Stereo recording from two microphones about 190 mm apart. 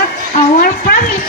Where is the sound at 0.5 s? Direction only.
50° left (ahead or behind).